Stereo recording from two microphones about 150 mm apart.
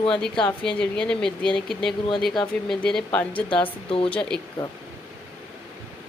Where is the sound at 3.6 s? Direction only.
35° left (ahead or behind).